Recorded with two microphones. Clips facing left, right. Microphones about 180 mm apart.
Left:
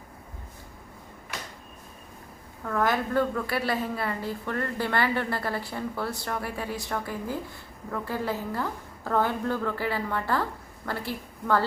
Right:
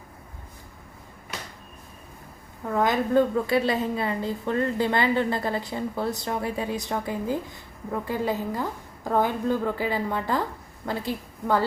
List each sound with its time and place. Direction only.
2.6 s a woman's voice: 20° right (ahead or behind)